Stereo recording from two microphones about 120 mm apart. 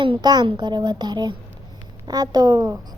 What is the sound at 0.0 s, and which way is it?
A woman's voice, 40° right (ahead or behind).